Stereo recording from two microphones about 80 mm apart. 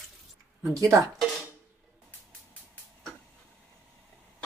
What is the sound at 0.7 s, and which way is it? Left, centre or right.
Speech, right.